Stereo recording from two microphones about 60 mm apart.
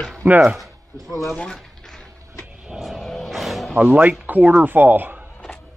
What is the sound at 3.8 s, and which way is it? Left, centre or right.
Speech, right.